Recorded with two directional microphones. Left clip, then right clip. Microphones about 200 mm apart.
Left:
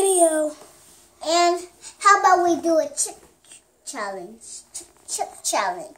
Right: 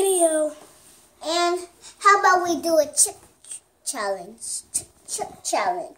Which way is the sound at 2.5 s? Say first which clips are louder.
Even; 50° right (ahead or behind).